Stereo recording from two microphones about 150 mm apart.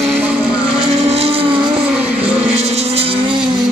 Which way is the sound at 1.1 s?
40° right (ahead or behind).